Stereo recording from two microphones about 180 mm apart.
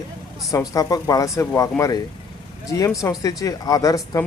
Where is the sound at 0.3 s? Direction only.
20° left (ahead or behind).